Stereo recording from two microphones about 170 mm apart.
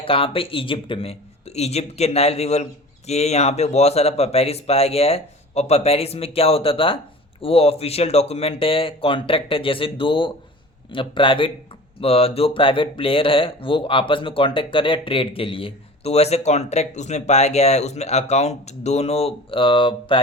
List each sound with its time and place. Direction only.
0.0 s speech: 30° left (ahead or behind)